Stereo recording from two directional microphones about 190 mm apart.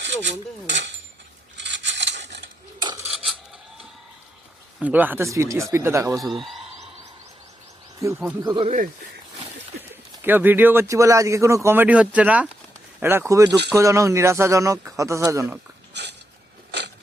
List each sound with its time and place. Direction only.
0.0 s a sound: 70° right (ahead or behind)
2.8 s cutlery: 20° right (ahead or behind)
4.8 s speech: 10° right (ahead or behind)
8.0 s speech: 15° right (ahead or behind)
8.4 s speech: 25° right (ahead or behind)
10.2 s speech: 10° right (ahead or behind)
15.9 s biting: 65° right (ahead or behind)